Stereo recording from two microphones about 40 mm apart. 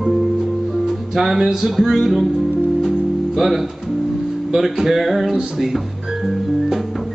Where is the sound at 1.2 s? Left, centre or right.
Centre.